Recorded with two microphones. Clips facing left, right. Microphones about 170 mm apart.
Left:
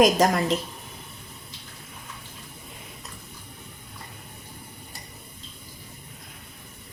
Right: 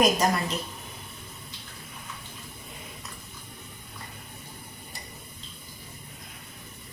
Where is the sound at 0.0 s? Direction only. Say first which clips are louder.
Left 4 dB; 90° left.